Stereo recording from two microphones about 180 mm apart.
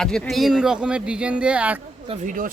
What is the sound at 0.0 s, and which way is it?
Speech, centre (ahead or behind).